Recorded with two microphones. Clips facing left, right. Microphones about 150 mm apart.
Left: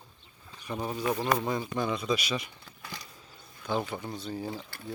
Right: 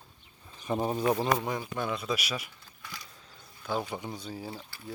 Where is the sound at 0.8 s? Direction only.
35° right (ahead or behind).